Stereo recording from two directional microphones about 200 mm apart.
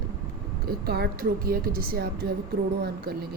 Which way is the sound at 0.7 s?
50° right (ahead or behind).